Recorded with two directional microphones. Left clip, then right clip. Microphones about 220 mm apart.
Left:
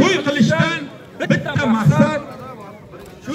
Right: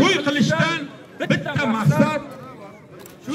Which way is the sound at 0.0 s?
35° right (ahead or behind).